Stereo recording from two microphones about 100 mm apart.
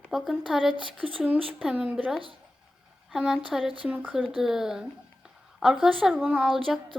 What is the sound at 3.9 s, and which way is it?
Speech, 15° right (ahead or behind).